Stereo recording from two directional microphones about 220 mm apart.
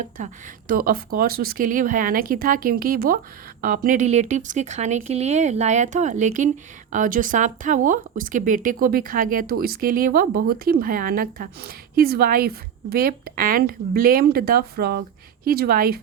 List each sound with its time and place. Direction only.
0.7 s speech: 40° right (ahead or behind)